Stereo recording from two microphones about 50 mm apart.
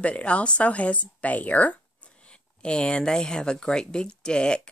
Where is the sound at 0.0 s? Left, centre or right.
Left.